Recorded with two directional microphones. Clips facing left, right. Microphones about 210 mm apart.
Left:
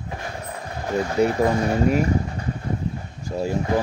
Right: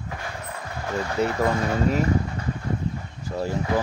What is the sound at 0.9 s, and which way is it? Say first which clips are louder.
Speech: left 5 dB; 15° left (ahead or behind).